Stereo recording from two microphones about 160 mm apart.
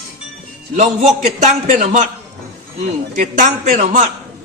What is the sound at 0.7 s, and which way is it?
A man's voice, 45° right (ahead or behind).